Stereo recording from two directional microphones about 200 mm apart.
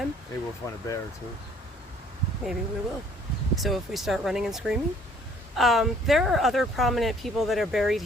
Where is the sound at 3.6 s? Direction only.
Centre (ahead or behind).